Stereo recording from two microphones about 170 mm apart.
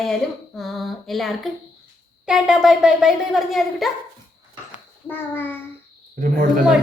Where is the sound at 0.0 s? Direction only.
Centre (ahead or behind).